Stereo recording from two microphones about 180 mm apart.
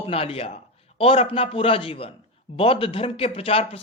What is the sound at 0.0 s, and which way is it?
A man's voice, 35° left (ahead or behind).